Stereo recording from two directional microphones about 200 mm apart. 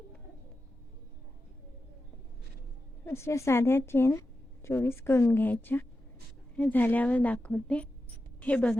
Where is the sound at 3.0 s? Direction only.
15° left (ahead or behind).